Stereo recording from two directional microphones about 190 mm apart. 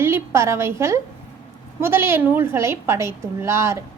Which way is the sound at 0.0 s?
15° right (ahead or behind).